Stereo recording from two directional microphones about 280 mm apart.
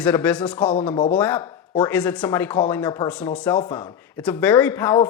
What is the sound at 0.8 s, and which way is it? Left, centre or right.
Speech, centre.